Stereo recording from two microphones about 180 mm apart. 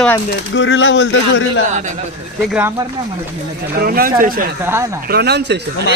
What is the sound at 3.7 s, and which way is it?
Speech, 55° right (ahead or behind).